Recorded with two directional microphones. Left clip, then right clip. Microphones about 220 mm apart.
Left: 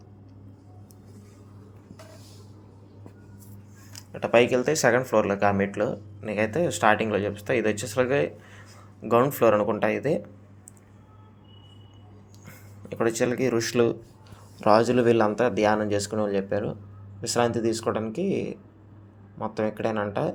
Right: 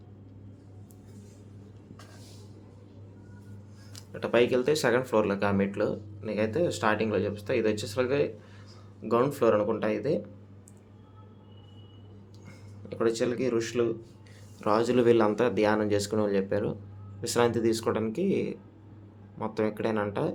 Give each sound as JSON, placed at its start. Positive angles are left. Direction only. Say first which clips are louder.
{"t": 3.9, "sound": "speech", "louder": "left 5 dB", "side_deg": 5}
{"t": 12.5, "sound": "speech", "louder": "left 3 dB", "side_deg": 15}